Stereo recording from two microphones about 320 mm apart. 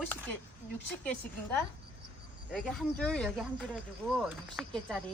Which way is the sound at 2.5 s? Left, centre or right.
Centre.